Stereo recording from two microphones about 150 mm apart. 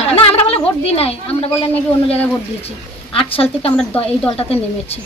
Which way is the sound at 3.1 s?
40° left (ahead or behind).